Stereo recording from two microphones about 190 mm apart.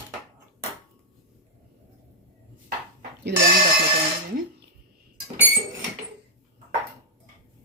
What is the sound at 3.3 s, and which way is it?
Speech, 60° right (ahead or behind).